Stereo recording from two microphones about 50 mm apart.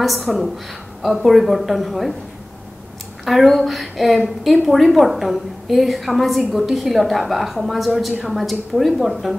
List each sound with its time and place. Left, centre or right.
0.0 s a woman's voice: centre
3.3 s a woman's voice: centre